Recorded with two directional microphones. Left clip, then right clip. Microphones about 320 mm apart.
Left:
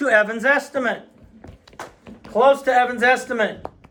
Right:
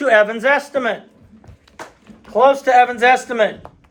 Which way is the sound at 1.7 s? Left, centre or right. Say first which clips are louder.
Right 1 dB; left.